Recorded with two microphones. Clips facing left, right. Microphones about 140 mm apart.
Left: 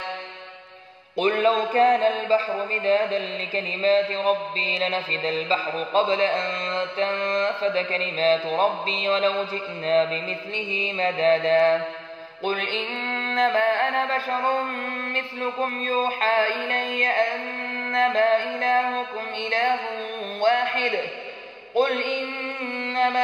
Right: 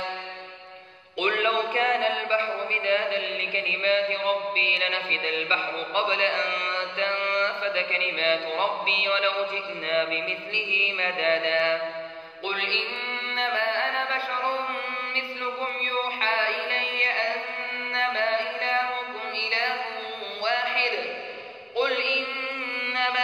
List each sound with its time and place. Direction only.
1.1 s music: 35° left (ahead or behind)
17.9 s mantra: 45° left (ahead or behind)
19.3 s music: 45° left (ahead or behind)
20.3 s a sound: 45° left (ahead or behind)
22.9 s music: 40° left (ahead or behind)